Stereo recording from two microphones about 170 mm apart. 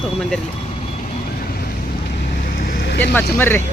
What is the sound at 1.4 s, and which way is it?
Vehicle, 60° left (ahead or behind).